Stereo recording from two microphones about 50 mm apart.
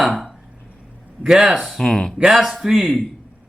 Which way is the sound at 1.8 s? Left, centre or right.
Centre.